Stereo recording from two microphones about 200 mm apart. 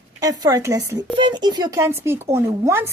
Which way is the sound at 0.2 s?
20° right (ahead or behind).